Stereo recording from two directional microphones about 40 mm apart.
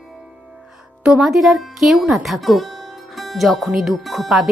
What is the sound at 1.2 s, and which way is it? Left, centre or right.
Speech, centre.